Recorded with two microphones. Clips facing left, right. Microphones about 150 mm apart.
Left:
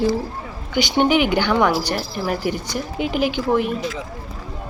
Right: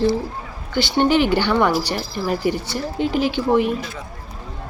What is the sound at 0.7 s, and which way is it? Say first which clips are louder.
Speech: even; 15° left (ahead or behind).